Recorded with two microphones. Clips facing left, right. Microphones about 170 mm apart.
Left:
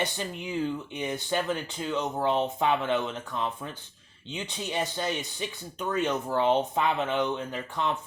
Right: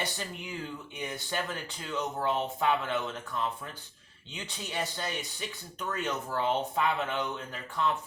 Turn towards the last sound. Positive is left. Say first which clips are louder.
# left 2 dB
turn(degrees=20)  # may be behind; listen again after turning